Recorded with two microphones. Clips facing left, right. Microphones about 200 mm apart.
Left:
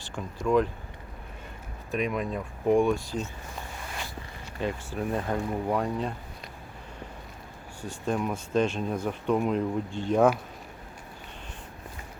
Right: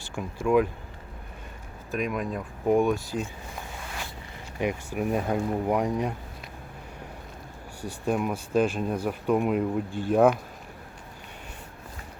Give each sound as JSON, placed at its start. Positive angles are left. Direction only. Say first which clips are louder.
{"t": 0.4, "sound": "speech", "louder": "right 2 dB", "side_deg": -10}
{"t": 1.9, "sound": "speech", "louder": "even", "side_deg": 0}
{"t": 4.6, "sound": "speech", "louder": "right 3 dB", "side_deg": -15}
{"t": 8.0, "sound": "speech", "louder": "right 2 dB", "side_deg": -10}